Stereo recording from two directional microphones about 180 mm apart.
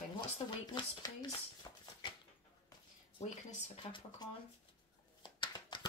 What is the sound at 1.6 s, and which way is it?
Shuffle, 25° left (ahead or behind).